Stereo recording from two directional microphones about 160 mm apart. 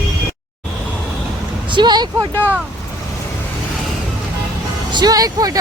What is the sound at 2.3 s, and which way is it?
Speech, 10° left (ahead or behind).